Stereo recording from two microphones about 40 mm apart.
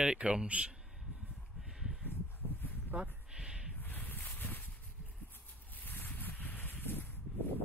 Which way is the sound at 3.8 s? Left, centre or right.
Left.